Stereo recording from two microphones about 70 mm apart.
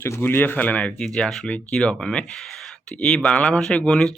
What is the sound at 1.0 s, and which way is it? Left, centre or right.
Speech, centre.